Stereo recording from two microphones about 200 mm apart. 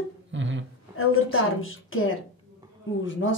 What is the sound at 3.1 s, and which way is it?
Speech, 70° left (ahead or behind).